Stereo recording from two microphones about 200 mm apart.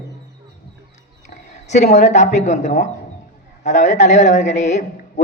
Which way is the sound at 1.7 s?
35° left (ahead or behind).